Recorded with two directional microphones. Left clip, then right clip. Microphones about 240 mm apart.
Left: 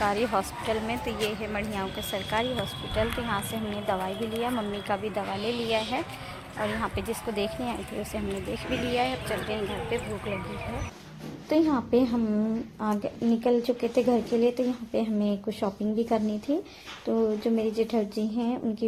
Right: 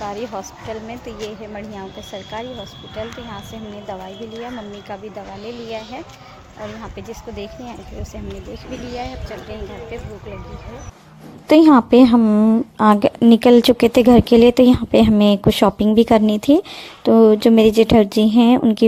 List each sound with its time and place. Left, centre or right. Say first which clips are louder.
0.0 s a woman's voice: left 1 dB; centre
2.9 s speech: left 2 dB; centre
4.9 s speech: left 3 dB; centre
11.4 s a woman's voice: right 14 dB; right